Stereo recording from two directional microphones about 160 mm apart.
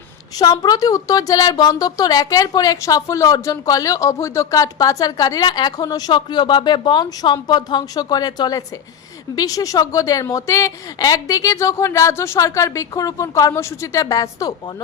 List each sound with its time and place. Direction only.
0.3 s a woman's voice: 25° left (ahead or behind)